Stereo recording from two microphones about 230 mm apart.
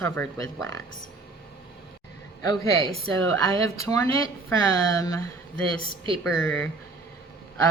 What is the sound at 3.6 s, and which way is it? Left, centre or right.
Speech, centre.